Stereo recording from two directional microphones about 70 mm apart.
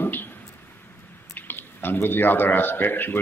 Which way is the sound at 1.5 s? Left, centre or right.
Left.